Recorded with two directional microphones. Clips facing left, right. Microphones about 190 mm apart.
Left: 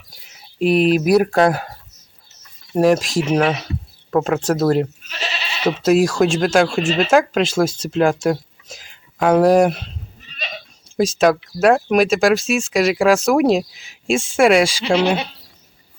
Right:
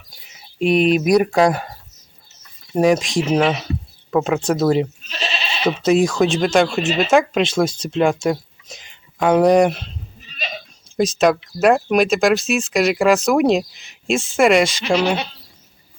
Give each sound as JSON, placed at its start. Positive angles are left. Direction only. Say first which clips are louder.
{"t": 0.1, "sound": "speech", "louder": "even", "side_deg": 0}
{"t": 2.7, "sound": "speech", "louder": "left 1 dB", "side_deg": 0}
{"t": 14.8, "sound": "speech", "louder": "left 1 dB", "side_deg": 30}
{"t": 15.0, "sound": "speech", "louder": "left 1 dB", "side_deg": 10}